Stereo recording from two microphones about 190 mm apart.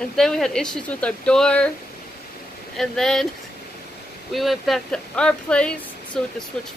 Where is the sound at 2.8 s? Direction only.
Centre (ahead or behind).